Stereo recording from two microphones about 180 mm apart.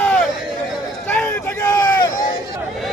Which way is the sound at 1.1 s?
10° left (ahead or behind).